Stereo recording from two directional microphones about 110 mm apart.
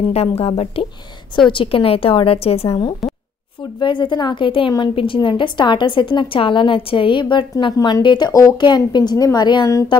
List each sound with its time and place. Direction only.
0.1 s a woman's voice: 65° left (ahead or behind)
3.0 s a sound: centre (ahead or behind)
3.8 s a woman's voice: 45° left (ahead or behind)